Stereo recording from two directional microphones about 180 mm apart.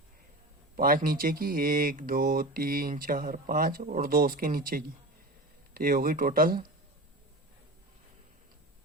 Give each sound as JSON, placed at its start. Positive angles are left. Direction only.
{"t": 0.8, "sound": "speech", "side_deg": -50}